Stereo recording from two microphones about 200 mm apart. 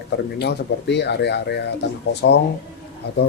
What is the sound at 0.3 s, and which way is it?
Speech, 60° left (ahead or behind).